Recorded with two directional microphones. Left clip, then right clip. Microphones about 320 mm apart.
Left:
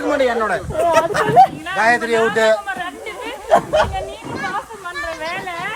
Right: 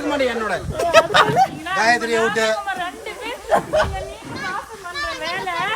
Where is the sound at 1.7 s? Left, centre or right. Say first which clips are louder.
Left 2 dB; centre.